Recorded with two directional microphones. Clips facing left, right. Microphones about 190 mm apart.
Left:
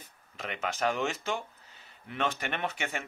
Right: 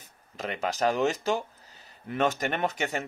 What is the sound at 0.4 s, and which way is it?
Speech, 40° right (ahead or behind).